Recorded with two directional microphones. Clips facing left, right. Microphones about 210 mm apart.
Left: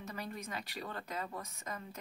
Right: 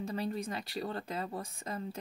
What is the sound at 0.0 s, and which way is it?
Speech, 30° right (ahead or behind).